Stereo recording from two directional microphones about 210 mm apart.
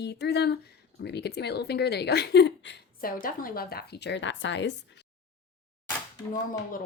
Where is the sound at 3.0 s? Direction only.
40° left (ahead or behind); by 4.7 s 60° left (ahead or behind).